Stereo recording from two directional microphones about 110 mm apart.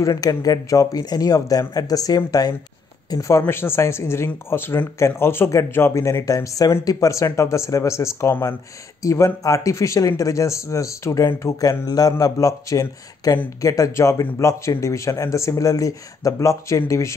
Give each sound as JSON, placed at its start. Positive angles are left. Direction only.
{"t": 0.0, "sound": "speech", "side_deg": 35}